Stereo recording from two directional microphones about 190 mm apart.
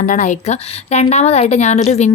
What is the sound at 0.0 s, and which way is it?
Speech, 40° left (ahead or behind).